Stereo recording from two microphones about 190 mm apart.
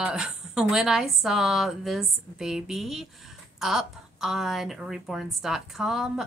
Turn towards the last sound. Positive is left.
turn(degrees=0)  # may be behind; listen again after turning